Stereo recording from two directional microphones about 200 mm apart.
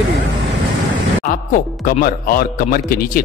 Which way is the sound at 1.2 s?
40° left (ahead or behind).